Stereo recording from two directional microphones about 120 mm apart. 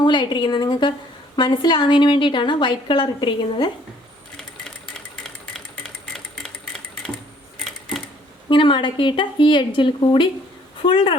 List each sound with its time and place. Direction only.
0.0 s a woman's voice: 40° left (ahead or behind)
4.9 s stir: 5° left (ahead or behind)
7.6 s a sound: 5° left (ahead or behind)
8.4 s a woman's voice: 40° left (ahead or behind)